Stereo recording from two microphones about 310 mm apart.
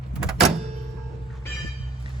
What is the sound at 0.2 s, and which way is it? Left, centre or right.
Door, centre.